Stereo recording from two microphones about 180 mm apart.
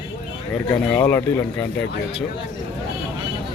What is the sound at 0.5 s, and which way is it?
Speech, 10° left (ahead or behind).